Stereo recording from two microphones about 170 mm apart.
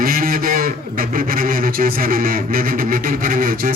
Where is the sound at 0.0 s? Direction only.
55° right (ahead or behind).